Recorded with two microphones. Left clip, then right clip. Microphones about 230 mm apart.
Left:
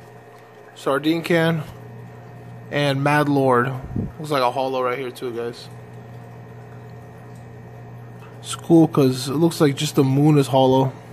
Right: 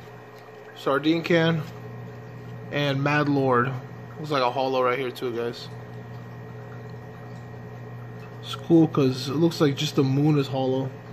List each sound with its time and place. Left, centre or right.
0.8 s speech: centre
2.7 s speech: centre
8.5 s speech: centre